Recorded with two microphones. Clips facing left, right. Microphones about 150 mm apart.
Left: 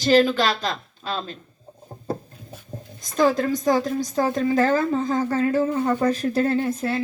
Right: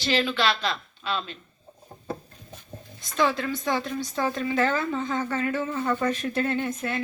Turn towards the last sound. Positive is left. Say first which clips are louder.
# left 5 dB
turn(degrees=35)  # may be behind; listen again after turning